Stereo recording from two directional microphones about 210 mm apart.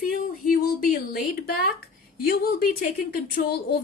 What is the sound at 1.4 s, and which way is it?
A woman's voice, 45° left (ahead or behind).